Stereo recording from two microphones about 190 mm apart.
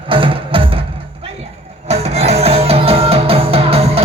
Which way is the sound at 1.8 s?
35° right (ahead or behind).